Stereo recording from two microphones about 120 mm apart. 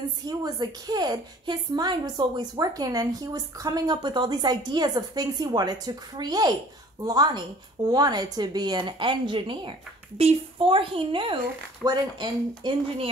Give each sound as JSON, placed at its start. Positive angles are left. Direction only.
{"t": 0.2, "sound": "a woman's voice", "side_deg": -30}
{"t": 12.8, "sound": "a woman's voice", "side_deg": -55}